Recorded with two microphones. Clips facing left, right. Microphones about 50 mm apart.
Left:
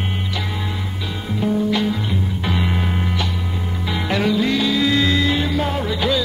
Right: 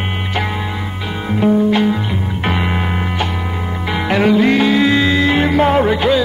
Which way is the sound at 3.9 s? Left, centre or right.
Right.